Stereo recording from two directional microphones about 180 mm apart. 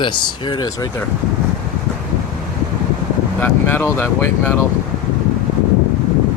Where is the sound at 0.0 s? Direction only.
25° left (ahead or behind).